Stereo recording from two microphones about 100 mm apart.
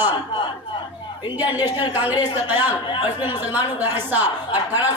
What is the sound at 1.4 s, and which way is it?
Speech, 15° right (ahead or behind).